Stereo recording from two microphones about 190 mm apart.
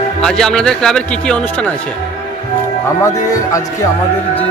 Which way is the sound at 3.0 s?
15° left (ahead or behind).